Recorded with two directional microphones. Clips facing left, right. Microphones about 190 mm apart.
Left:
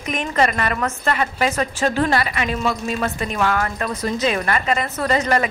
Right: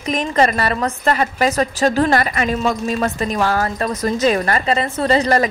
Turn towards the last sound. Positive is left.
turn(degrees=-35)  # may be behind; listen again after turning